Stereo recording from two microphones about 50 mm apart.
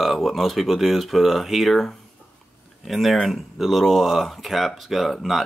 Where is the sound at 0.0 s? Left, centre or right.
Centre.